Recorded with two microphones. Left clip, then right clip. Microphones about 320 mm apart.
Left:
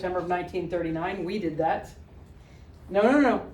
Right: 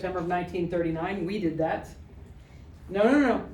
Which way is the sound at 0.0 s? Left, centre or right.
Centre.